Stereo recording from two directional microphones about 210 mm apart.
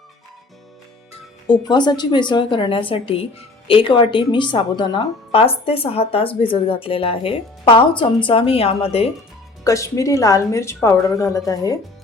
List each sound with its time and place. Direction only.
1.5 s a woman's voice: 20° left (ahead or behind)
9.6 s a woman's voice: 15° left (ahead or behind)